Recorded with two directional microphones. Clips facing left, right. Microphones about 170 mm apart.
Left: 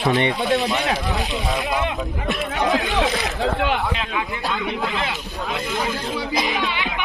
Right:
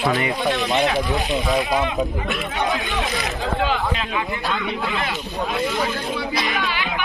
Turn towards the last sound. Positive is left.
turn(degrees=20)  # may be behind; listen again after turning